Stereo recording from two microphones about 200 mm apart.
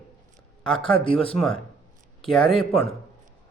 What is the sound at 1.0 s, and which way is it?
Speech, 25° left (ahead or behind).